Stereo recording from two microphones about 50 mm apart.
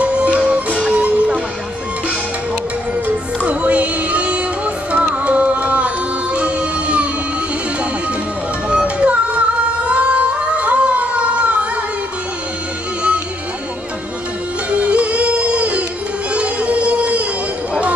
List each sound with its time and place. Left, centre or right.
0.0 s music: right
3.4 s music: right
8.6 s music: right
14.7 s music: right
16.3 s a sound: right